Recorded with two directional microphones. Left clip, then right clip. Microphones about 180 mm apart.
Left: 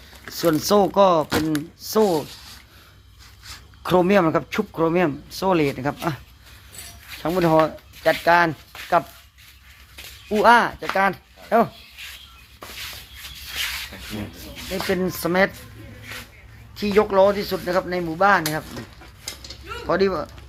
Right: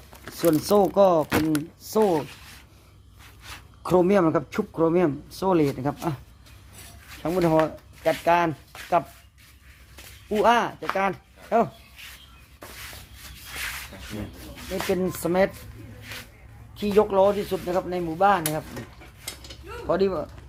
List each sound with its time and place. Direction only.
0.3 s a man's voice: 5° right (ahead or behind)
3.8 s a man's voice: centre (ahead or behind)
9.9 s a sound: 15° left (ahead or behind)
10.4 s a man's voice: centre (ahead or behind)
12.0 s a sound: 20° left (ahead or behind)
14.8 s a man's voice: centre (ahead or behind)
16.7 s a man's voice: 5° left (ahead or behind)
19.9 s speech: 10° left (ahead or behind)